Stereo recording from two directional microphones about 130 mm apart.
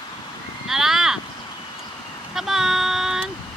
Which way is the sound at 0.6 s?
Centre (ahead or behind).